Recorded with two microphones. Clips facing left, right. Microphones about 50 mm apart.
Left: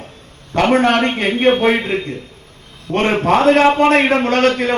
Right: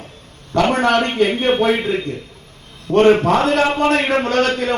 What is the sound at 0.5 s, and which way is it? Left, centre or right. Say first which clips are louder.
A man's voice: left 2 dB; left.